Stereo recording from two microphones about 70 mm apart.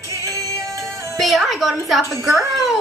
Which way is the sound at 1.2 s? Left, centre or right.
Centre.